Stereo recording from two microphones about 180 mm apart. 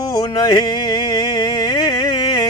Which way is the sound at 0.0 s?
20° left (ahead or behind).